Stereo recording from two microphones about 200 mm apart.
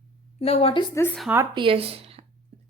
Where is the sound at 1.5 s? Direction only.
25° right (ahead or behind).